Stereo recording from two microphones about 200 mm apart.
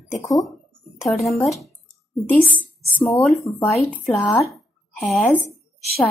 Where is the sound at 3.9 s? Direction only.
10° left (ahead or behind).